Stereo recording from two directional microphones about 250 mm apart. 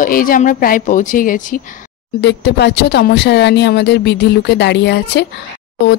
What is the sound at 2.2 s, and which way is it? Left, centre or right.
A woman's voice, left.